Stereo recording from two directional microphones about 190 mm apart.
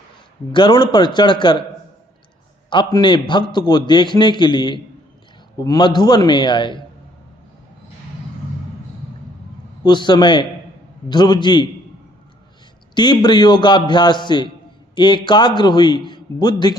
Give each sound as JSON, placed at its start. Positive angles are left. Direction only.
{"t": 0.5, "sound": "a man's voice", "side_deg": 25}
{"t": 2.6, "sound": "a man's voice", "side_deg": 25}
{"t": 9.8, "sound": "a man's voice", "side_deg": 25}
{"t": 12.9, "sound": "a man's voice", "side_deg": 25}